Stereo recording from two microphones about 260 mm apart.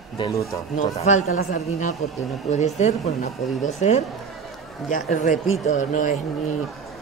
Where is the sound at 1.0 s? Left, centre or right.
Left.